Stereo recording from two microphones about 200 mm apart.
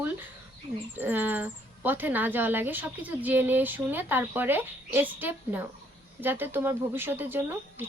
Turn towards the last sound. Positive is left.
turn(degrees=-10)  # may be behind; listen again after turning